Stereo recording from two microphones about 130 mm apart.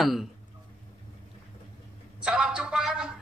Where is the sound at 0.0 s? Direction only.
Centre (ahead or behind).